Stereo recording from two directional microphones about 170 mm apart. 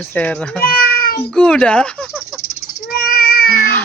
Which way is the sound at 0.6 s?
65° left (ahead or behind).